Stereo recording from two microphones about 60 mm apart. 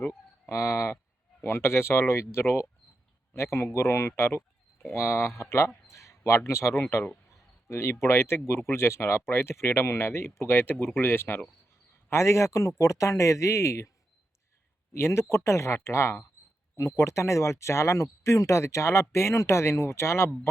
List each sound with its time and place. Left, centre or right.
0.4 s speech: left
1.5 s speech: left
12.1 s speech: left
14.9 s speech: left